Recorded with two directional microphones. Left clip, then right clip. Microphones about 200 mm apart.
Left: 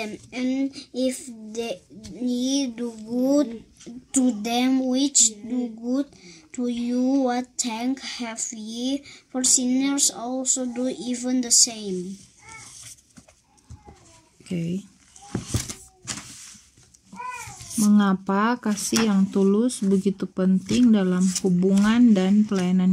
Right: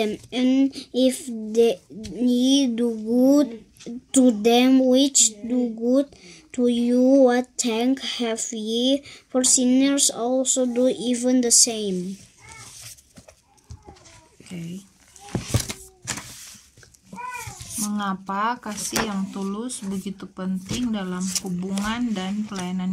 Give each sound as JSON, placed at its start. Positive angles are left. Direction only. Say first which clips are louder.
{"t": 0.0, "sound": "a child's voice", "louder": "right 6 dB", "side_deg": -45}
{"t": 17.8, "sound": "speech", "louder": "left 5 dB", "side_deg": 30}
{"t": 21.2, "sound": "speech", "louder": "left 2 dB", "side_deg": -15}
{"t": 21.5, "sound": "speech", "louder": "left 10 dB", "side_deg": 30}